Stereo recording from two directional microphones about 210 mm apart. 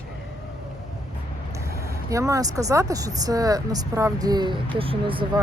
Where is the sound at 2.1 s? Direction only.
15° right (ahead or behind).